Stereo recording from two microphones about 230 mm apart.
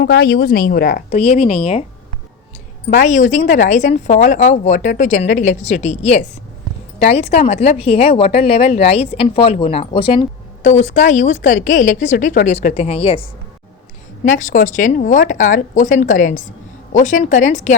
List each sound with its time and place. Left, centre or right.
0.0 s speech: left
2.8 s speech: left
14.3 s speech: left